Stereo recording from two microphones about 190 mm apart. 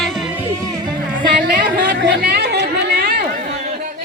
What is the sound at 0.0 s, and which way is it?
Music, centre (ahead or behind).